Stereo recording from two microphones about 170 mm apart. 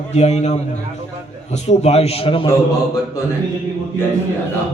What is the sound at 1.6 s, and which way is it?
Speech, 40° left (ahead or behind).